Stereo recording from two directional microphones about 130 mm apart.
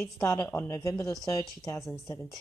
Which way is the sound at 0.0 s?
20° left (ahead or behind).